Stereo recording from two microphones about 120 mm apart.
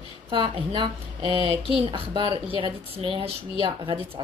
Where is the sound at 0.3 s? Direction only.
45° right (ahead or behind).